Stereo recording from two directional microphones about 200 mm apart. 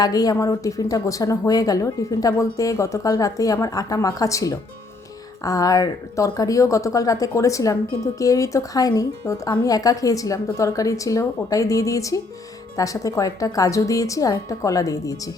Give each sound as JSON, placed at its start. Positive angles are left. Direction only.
{"t": 0.0, "sound": "a woman's voice", "side_deg": 20}